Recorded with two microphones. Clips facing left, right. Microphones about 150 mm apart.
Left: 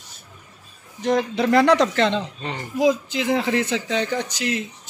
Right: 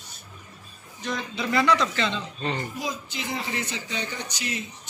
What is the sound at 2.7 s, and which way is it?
A man's voice, 90° left.